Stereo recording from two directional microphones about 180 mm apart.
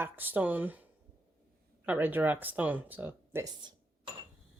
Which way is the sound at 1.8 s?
10° right (ahead or behind).